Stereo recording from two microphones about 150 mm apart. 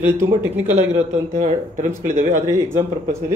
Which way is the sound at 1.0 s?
55° right (ahead or behind).